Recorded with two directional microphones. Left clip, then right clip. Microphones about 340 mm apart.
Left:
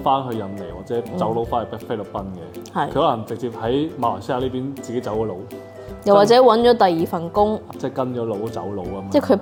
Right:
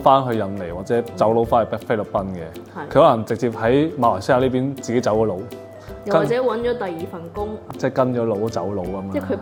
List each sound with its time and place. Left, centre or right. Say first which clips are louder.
0.0 s speech: right 5 dB; right
6.2 s speech: left 8 dB; left
7.8 s speech: right 5 dB; right
9.1 s speech: left 9 dB; left